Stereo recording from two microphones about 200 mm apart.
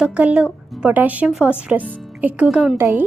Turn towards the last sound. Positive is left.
turn(degrees=-10)  # may be behind; listen again after turning